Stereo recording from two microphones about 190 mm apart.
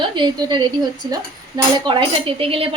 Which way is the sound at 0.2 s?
25° right (ahead or behind).